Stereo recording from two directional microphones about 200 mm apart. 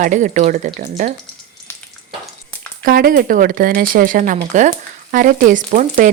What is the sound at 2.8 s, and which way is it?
Speech, 45° right (ahead or behind).